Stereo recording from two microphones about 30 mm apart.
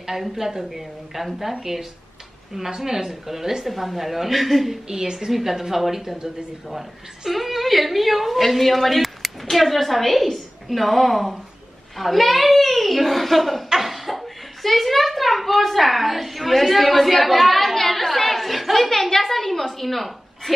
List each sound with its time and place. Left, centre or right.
0.0 s a woman's voice: centre
4.8 s a woman's voice: centre
5.3 s a woman's voice: centre
13.7 s a sound: centre